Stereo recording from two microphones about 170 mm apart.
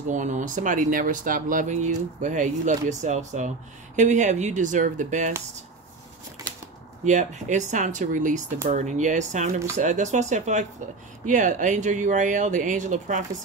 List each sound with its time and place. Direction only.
0.1 s speech: 45° right (ahead or behind)
7.1 s speech: 45° right (ahead or behind)